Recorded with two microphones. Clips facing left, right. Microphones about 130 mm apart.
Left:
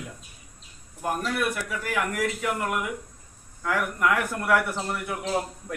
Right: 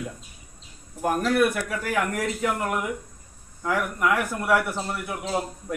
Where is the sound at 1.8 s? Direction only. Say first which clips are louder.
Right 1 dB; 30° right (ahead or behind).